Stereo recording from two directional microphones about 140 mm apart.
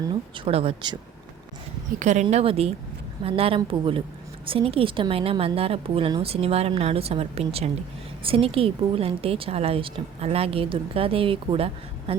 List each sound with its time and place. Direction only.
0.1 s speech: 40° right (ahead or behind)
2.0 s speech: 55° right (ahead or behind)
2.3 s a woman's voice: 45° right (ahead or behind)